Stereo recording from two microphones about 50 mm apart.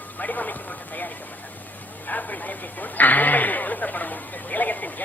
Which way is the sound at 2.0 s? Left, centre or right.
Left.